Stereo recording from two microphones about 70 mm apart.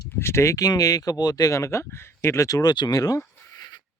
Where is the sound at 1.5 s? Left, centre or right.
Left.